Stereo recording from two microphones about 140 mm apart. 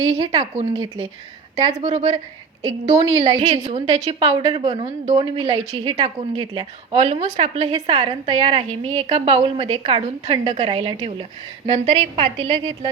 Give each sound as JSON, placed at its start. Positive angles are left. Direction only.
{"t": 0.0, "sound": "a woman's voice", "side_deg": -35}
{"t": 1.8, "sound": "a woman's voice", "side_deg": -50}
{"t": 2.6, "sound": "a woman's voice", "side_deg": -30}
{"t": 3.4, "sound": "a woman's voice", "side_deg": -50}